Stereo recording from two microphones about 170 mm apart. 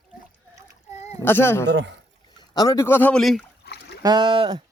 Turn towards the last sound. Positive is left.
turn(degrees=-30)  # may be behind; listen again after turning